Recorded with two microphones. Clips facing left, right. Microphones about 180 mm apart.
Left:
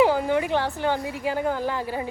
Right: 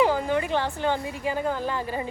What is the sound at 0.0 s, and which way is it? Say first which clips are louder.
A woman's voice: left 2 dB; 15° left (ahead or behind).